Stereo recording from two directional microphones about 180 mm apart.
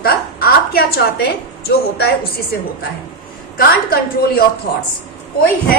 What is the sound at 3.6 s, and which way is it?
Speech, 55° left (ahead or behind).